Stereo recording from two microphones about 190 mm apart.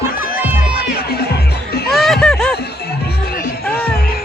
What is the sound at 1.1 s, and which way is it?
Music, 55° left (ahead or behind).